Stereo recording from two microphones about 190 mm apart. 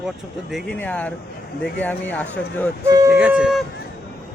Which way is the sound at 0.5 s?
5° left (ahead or behind).